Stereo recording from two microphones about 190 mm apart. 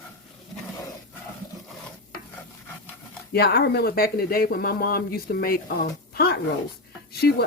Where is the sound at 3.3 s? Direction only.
55° left (ahead or behind).